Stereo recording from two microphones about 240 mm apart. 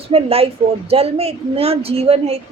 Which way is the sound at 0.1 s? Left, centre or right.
Right.